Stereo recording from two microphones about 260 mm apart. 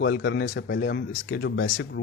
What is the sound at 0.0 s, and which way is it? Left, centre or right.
Speech, left.